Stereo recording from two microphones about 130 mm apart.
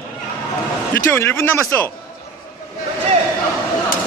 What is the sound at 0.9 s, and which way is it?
Speech, 20° left (ahead or behind).